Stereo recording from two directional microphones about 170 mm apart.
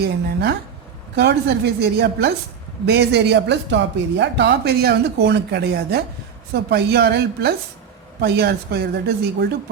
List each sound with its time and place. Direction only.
0.0 s speech: 75° right (ahead or behind)